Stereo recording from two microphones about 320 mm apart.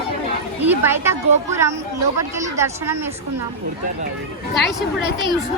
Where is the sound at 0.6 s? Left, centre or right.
Centre.